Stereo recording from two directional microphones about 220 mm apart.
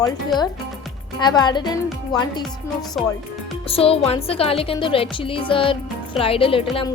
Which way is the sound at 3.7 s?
25° left (ahead or behind).